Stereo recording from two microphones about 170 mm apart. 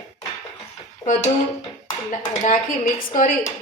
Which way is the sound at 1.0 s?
20° left (ahead or behind).